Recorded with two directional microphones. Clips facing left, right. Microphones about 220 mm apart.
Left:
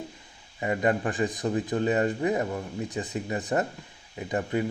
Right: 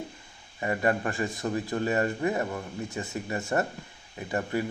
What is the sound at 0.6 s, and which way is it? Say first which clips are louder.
Speech: left 1 dB; 20° left (ahead or behind).